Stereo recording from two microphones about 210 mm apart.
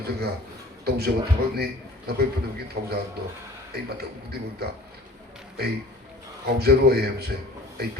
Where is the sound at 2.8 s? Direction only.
55° right (ahead or behind).